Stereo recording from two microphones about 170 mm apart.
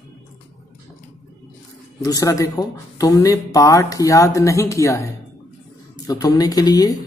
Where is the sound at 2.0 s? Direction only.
20° left (ahead or behind).